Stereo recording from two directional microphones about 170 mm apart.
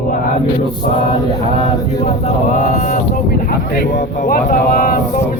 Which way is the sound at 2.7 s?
50° left (ahead or behind).